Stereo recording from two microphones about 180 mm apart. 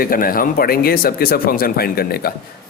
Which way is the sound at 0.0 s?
55° left (ahead or behind).